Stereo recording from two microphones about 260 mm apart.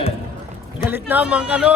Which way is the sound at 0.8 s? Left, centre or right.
Centre.